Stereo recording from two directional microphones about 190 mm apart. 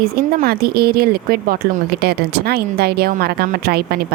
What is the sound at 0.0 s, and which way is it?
Speech, 50° right (ahead or behind).